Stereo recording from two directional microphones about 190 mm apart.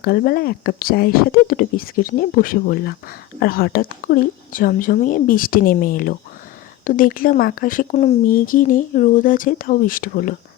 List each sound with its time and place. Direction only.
0.0 s speech: 55° left (ahead or behind)